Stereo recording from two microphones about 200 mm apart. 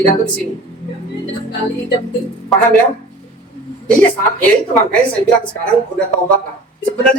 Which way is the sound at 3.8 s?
5° left (ahead or behind).